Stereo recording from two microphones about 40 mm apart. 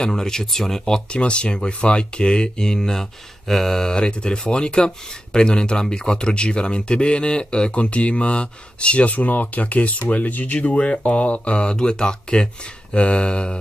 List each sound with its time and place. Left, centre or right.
0.0 s speech: centre
3.9 s speech: left